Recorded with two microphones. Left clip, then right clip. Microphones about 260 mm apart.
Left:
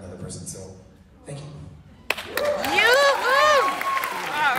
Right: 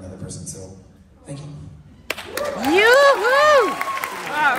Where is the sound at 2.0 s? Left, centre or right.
Left.